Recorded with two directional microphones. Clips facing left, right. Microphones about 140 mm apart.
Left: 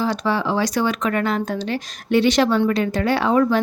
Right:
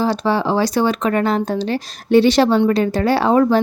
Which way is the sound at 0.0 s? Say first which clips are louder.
Right 4 dB; 30° right (ahead or behind).